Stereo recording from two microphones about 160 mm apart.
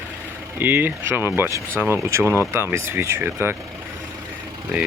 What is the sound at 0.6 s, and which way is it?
Speech, 10° right (ahead or behind).